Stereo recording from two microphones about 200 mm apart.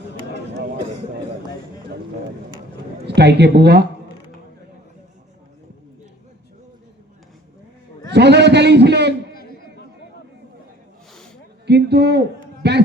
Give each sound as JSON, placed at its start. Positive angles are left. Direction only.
{"t": 3.2, "sound": "a woman's voice", "side_deg": -55}
{"t": 8.0, "sound": "a sound", "side_deg": -55}
{"t": 9.3, "sound": "chatter", "side_deg": 50}
{"t": 11.6, "sound": "a woman's voice", "side_deg": -55}